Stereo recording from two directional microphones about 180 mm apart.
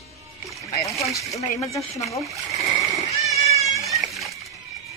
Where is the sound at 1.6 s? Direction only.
15° left (ahead or behind).